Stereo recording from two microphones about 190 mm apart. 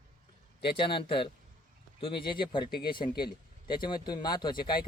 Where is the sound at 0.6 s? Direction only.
25° left (ahead or behind).